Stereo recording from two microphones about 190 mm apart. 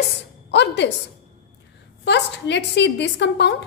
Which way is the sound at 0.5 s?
65° left (ahead or behind).